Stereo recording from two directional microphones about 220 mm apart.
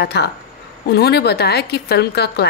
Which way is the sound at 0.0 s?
50° left (ahead or behind).